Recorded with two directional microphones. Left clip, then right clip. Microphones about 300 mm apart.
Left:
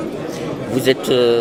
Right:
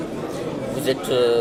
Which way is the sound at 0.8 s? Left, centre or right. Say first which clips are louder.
Left 5 dB; left.